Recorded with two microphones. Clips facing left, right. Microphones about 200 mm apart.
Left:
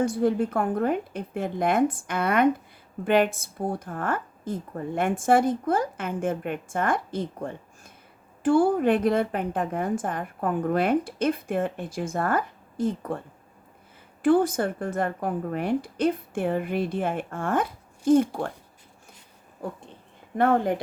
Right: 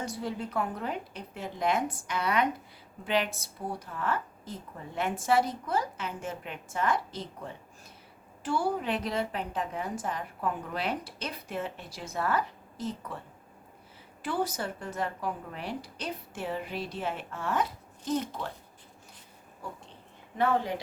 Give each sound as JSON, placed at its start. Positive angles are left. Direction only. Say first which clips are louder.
{"t": 0.0, "sound": "a woman's voice", "louder": "left 12 dB", "side_deg": 50}
{"t": 14.2, "sound": "a woman's voice", "louder": "left 11 dB", "side_deg": 50}
{"t": 19.6, "sound": "a sound", "louder": "left 8 dB", "side_deg": 55}
{"t": 20.3, "sound": "a woman's voice", "louder": "left 6 dB", "side_deg": 55}